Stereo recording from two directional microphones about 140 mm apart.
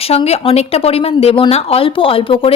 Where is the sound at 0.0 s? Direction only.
45° left (ahead or behind).